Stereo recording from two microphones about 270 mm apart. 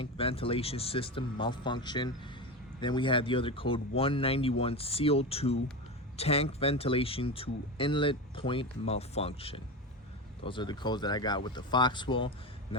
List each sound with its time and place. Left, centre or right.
0.0 s speech: left